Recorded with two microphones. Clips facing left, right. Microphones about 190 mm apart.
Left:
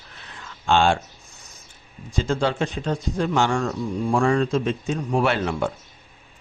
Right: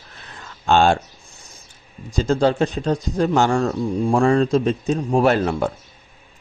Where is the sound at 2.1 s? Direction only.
40° right (ahead or behind).